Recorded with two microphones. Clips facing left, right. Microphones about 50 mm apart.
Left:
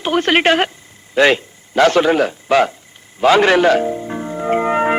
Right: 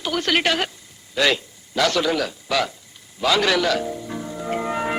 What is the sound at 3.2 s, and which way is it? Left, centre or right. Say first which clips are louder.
Music: left 8 dB; left.